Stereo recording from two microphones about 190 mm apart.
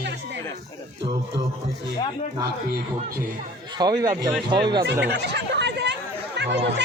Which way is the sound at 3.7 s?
20° right (ahead or behind).